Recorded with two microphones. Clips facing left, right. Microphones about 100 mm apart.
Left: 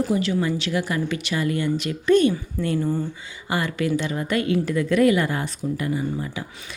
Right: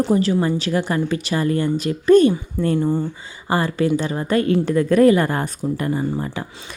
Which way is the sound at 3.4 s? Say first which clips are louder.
Right 5 dB; 35° right (ahead or behind).